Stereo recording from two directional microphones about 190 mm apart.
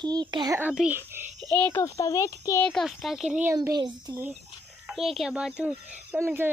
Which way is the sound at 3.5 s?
20° right (ahead or behind).